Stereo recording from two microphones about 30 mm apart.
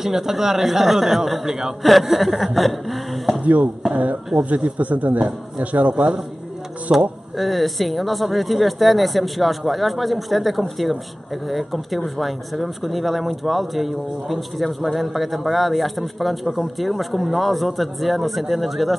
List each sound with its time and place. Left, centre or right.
0.0 s speech: centre
1.4 s a man's voice: centre
1.8 s a man's voice: centre
3.9 s speech: right
6.9 s a man's voice: right
7.3 s a man's voice: centre